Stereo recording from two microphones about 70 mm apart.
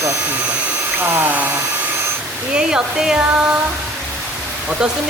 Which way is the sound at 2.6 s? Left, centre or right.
Centre.